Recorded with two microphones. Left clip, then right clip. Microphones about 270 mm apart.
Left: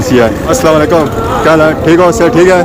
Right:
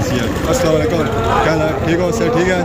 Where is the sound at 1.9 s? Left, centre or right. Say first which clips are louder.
Left 10 dB; centre.